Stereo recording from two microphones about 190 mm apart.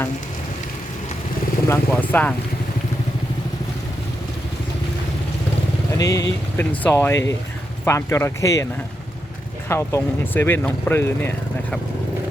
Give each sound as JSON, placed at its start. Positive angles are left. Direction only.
{"t": 1.6, "sound": "speech", "side_deg": 10}
{"t": 6.0, "sound": "speech", "side_deg": 20}
{"t": 9.6, "sound": "speech", "side_deg": 15}